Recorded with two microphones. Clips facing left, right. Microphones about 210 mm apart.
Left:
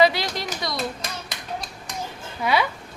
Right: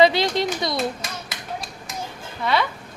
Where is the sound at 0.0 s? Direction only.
25° right (ahead or behind).